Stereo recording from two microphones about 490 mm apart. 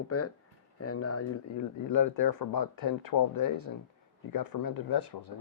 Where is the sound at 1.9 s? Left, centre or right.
Left.